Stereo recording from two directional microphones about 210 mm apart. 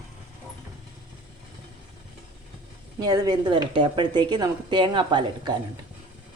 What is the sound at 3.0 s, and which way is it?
Speech, 20° right (ahead or behind).